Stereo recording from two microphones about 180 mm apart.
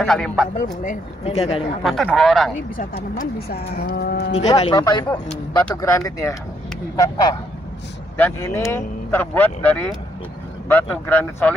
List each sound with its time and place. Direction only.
0.0 s speech: centre (ahead or behind)
0.8 s speech: 35° left (ahead or behind)
1.8 s speech: centre (ahead or behind)
2.8 s speech: 55° left (ahead or behind)
4.7 s speech: 20° left (ahead or behind)
5.3 s speech: 5° left (ahead or behind)
5.8 s speech: 15° left (ahead or behind)